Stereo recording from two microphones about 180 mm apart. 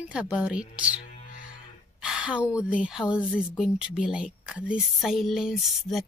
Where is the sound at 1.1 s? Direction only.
45° left (ahead or behind).